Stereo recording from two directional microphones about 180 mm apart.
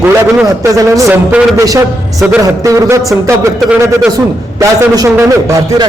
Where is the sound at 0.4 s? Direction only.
15° right (ahead or behind).